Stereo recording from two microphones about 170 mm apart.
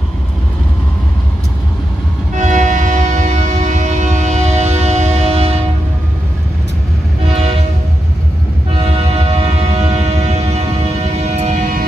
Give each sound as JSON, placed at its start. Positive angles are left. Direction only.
{"t": 2.3, "sound": "train", "side_deg": -45}
{"t": 7.2, "sound": "train", "side_deg": -40}
{"t": 8.7, "sound": "music", "side_deg": -35}